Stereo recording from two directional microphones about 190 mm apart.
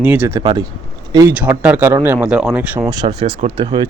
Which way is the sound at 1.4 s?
5° right (ahead or behind).